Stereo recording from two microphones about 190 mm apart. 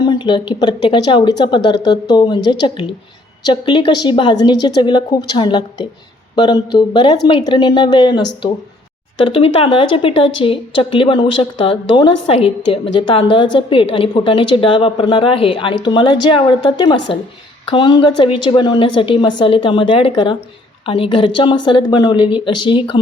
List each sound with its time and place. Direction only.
0.0 s a woman's voice: 25° left (ahead or behind)